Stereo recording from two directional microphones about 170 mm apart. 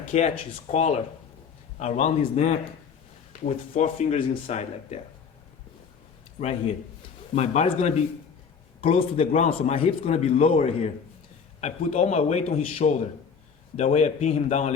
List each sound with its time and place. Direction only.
0.1 s a man's voice: 40° left (ahead or behind)
6.4 s a man's voice: 40° left (ahead or behind)